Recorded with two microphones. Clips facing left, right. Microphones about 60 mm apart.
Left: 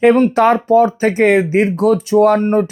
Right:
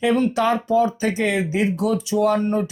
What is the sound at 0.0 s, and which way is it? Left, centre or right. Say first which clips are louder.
Speech: left 8 dB; left.